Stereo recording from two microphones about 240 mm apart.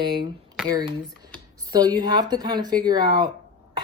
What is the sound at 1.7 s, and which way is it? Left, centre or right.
Speech, centre.